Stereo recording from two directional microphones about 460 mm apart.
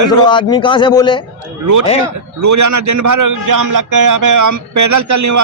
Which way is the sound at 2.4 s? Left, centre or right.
Right.